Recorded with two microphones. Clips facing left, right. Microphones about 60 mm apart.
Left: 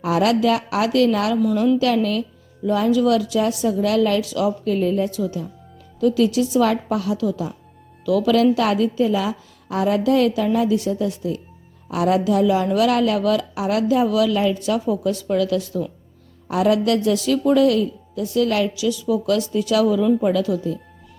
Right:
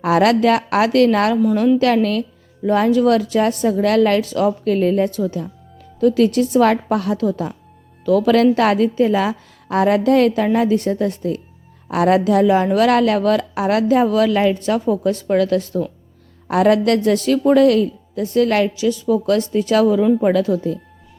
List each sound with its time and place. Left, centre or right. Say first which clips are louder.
0.0 s a woman's voice: right 4 dB; right
14.6 s speech: right 3 dB; right
16.5 s a woman's voice: right 4 dB; right